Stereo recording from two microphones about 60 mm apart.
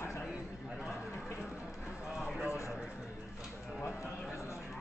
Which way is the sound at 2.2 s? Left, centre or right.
Centre.